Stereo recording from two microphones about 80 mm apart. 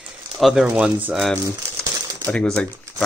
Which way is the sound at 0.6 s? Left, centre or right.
Centre.